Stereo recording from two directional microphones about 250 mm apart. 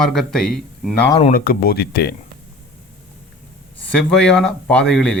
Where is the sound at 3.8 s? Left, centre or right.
Centre.